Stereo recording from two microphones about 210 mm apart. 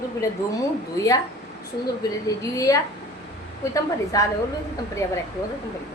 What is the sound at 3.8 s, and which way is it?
A woman's voice, 15° left (ahead or behind).